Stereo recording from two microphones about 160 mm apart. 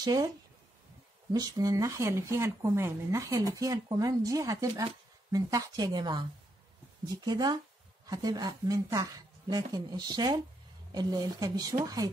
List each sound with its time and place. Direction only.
0.0 s a woman's voice: 25° right (ahead or behind)
1.3 s a woman's voice: 20° right (ahead or behind)
7.2 s a woman's voice: 25° right (ahead or behind)